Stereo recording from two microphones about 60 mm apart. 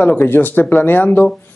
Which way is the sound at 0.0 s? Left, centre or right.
Left.